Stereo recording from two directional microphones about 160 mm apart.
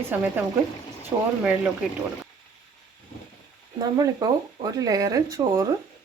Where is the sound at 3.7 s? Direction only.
25° right (ahead or behind).